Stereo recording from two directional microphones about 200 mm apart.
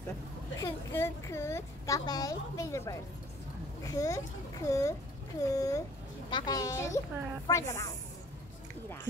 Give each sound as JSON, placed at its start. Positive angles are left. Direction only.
{"t": 0.6, "sound": "a woman's voice", "side_deg": 15}